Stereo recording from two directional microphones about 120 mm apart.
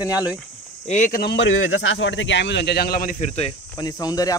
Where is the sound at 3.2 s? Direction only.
65° left (ahead or behind).